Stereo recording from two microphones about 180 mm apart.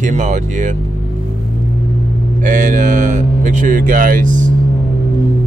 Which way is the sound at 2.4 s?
45° right (ahead or behind).